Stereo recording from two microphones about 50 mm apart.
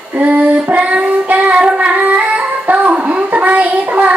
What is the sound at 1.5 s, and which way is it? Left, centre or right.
Singing, right.